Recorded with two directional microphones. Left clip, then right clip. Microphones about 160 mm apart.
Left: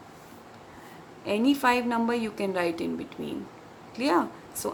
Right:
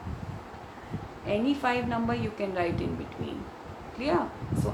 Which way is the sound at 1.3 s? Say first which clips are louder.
Left 4 dB; 50° left (ahead or behind).